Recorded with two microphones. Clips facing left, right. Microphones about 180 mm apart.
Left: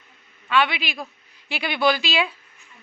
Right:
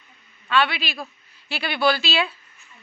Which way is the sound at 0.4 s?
15° left (ahead or behind).